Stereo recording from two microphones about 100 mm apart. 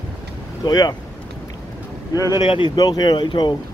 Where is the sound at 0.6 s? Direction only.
45° left (ahead or behind).